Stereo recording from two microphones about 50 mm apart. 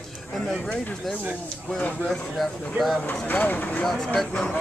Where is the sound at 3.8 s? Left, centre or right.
Centre.